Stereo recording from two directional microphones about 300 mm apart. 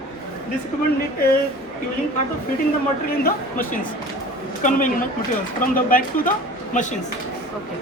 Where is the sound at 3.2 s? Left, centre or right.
Left.